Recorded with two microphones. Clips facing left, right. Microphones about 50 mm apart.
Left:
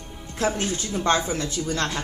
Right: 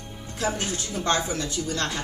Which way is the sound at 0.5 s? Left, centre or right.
Left.